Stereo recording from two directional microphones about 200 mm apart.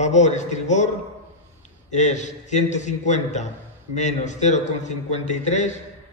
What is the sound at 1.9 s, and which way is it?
A man's voice, 35° left (ahead or behind).